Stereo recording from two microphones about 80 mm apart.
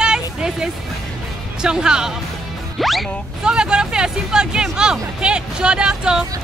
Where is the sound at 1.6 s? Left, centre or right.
Centre.